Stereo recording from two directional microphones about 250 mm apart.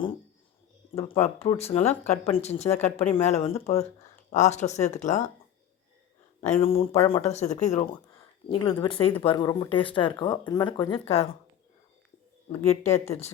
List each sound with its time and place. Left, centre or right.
1.2 s speech: left
6.4 s speech: left
12.5 s speech: left